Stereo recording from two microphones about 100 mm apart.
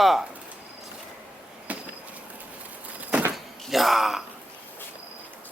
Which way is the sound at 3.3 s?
Centre (ahead or behind).